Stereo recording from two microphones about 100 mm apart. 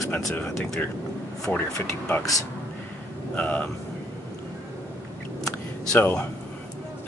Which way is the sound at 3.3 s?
15° left (ahead or behind).